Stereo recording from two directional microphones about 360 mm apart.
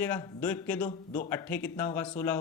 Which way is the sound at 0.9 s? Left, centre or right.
Left.